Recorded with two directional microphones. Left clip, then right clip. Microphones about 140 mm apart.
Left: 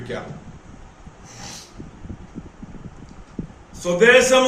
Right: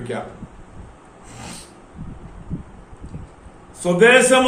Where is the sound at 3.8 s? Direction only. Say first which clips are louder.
Right 1 dB; 20° right (ahead or behind).